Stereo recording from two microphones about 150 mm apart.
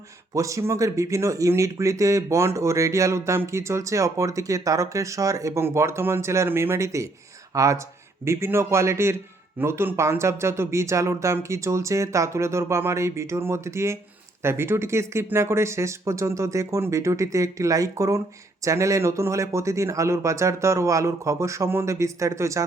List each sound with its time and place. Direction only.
0.3 s speech: 20° right (ahead or behind)